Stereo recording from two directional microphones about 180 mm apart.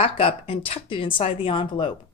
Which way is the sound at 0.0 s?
30° left (ahead or behind).